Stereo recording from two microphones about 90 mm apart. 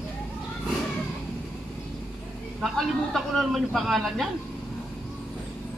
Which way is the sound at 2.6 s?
Centre (ahead or behind).